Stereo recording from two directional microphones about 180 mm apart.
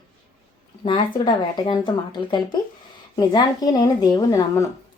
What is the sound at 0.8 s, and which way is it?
A woman's voice, 25° left (ahead or behind).